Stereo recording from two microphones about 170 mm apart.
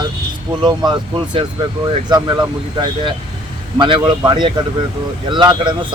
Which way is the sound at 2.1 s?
25° right (ahead or behind).